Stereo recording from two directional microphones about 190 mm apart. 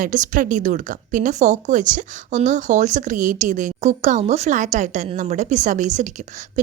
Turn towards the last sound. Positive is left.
turn(degrees=-40)  # may be behind; listen again after turning